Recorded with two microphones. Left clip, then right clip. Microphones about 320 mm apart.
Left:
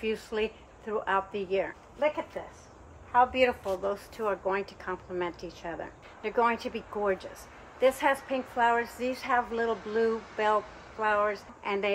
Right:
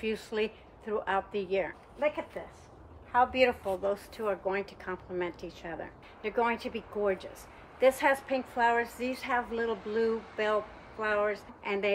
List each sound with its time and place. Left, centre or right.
0.0 s a woman's voice: centre